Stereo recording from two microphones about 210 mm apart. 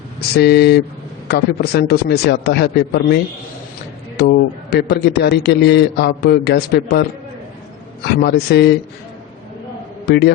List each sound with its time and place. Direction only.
0.3 s a man's voice: 50° left (ahead or behind)
4.2 s a man's voice: 50° left (ahead or behind)
8.0 s a man's voice: 50° left (ahead or behind)
10.1 s a man's voice: 50° left (ahead or behind)